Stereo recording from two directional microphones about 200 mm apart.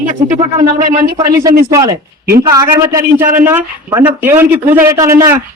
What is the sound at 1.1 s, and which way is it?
Speech, 20° right (ahead or behind).